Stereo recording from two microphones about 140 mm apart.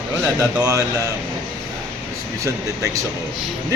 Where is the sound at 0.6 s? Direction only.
25° right (ahead or behind).